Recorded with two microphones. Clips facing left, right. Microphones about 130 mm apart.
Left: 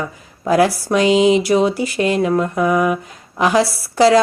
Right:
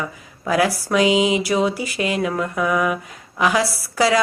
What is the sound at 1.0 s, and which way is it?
Mantra, 15° right (ahead or behind).